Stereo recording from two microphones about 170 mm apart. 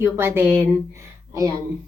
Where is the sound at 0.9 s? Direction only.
20° right (ahead or behind).